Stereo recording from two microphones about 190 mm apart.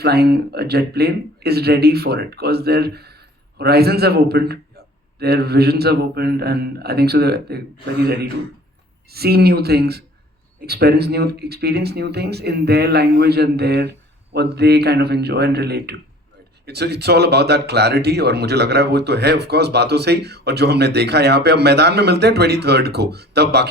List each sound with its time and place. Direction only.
0.0 s speech: 55° right (ahead or behind)